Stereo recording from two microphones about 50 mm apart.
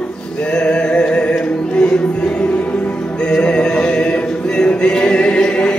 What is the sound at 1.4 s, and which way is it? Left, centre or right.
Music, left.